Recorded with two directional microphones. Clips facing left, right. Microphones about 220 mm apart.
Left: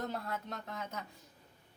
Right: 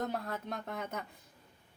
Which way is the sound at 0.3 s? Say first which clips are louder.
Right 2 dB; 50° right (ahead or behind).